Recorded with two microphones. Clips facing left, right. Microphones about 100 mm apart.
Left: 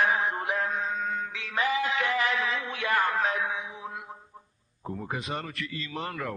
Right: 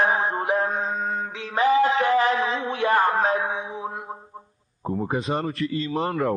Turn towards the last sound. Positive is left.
turn(degrees=-35)  # may be behind; listen again after turning